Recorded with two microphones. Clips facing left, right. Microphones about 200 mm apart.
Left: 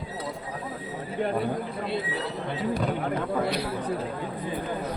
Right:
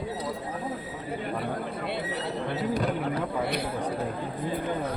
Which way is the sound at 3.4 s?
50° right (ahead or behind).